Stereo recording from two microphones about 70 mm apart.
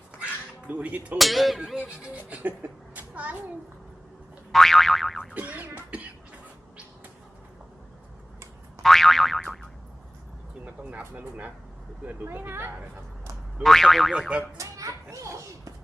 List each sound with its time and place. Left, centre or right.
0.7 s speech: centre
1.2 s speech: centre
2.0 s speech: right
2.9 s a sound: right
4.5 s boing: centre
5.3 s speech: right
5.9 s a sound: centre
8.8 s boing: centre
10.9 s speech: right
13.6 s speech: centre
14.1 s boing: centre
14.6 s children playing: right